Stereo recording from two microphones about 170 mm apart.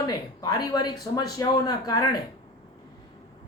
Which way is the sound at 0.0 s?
25° left (ahead or behind).